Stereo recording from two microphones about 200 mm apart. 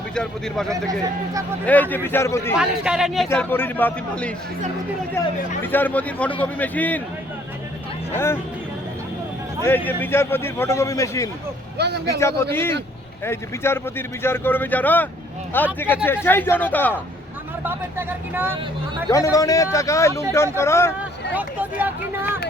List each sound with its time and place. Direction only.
0.1 s a man's voice: 5° left (ahead or behind)
2.6 s speech: 5° right (ahead or behind)
3.2 s a man's voice: 10° left (ahead or behind)
5.6 s a man's voice: 10° left (ahead or behind)
8.1 s a man's voice: 10° left (ahead or behind)
9.6 s a man's voice: 10° left (ahead or behind)
11.8 s speech: 55° right (ahead or behind)
12.2 s a man's voice: 10° left (ahead or behind)
17.6 s speech: 10° right (ahead or behind)
19.1 s a man's voice: 15° left (ahead or behind)
21.3 s speech: 10° right (ahead or behind)